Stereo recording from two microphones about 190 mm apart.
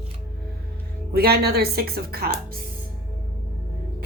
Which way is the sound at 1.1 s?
55° right (ahead or behind).